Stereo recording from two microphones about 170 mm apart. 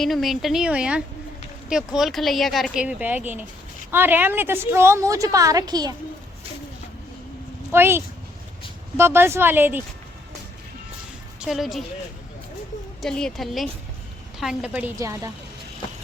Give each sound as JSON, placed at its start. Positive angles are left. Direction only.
{"t": 0.0, "sound": "a woman's voice", "side_deg": 0}
{"t": 7.7, "sound": "a woman's voice", "side_deg": -15}
{"t": 11.3, "sound": "a woman's voice", "side_deg": 0}
{"t": 13.0, "sound": "a woman's voice", "side_deg": 5}